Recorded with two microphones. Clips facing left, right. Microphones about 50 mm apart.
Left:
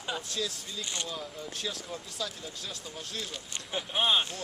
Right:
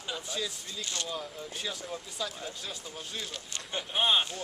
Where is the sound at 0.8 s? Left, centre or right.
Centre.